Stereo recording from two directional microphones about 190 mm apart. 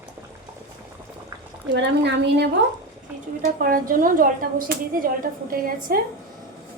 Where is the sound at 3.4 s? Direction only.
50° right (ahead or behind).